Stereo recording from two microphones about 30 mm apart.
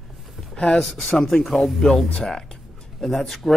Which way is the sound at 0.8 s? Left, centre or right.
Centre.